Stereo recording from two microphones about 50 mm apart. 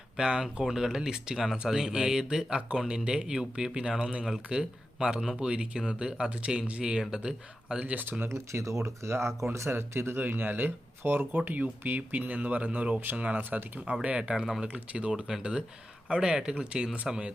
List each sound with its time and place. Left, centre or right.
0.2 s speech: centre
7.8 s speech: right
8.3 s speech: right; by 17.3 s centre